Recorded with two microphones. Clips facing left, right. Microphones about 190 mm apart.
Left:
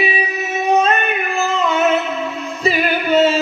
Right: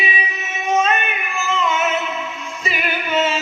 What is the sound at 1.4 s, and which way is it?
Music, 35° left (ahead or behind).